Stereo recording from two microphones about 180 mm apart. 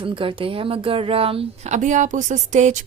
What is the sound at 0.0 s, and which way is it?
Speech, 30° right (ahead or behind).